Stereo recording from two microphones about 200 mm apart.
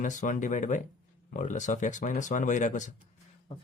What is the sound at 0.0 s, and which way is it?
Speech, 40° left (ahead or behind).